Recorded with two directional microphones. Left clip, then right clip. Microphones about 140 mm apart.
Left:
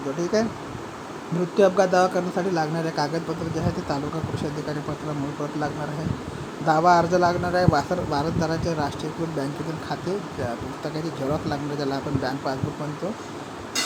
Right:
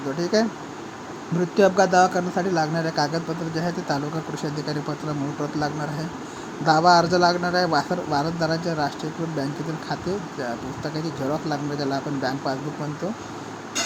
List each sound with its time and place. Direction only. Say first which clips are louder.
0.2 s a man's voice: right 2 dB; 15° right (ahead or behind)
1.5 s a man's voice: right 1 dB; 15° right (ahead or behind)
6.7 s a man's voice: right 1 dB; 10° right (ahead or behind)
11.4 s a man's voice: right 1 dB; 10° right (ahead or behind)